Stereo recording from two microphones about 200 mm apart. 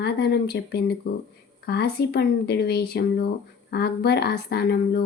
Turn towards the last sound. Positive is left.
turn(degrees=50)  # may be behind; listen again after turning